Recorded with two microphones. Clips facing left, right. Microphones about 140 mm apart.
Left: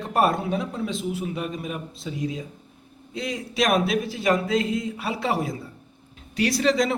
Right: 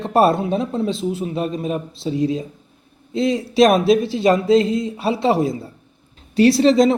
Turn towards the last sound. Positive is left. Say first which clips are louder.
# right 9 dB
turn(degrees=-25)  # may be behind; listen again after turning